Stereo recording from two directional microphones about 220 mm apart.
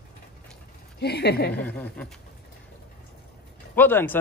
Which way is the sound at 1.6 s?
5° left (ahead or behind).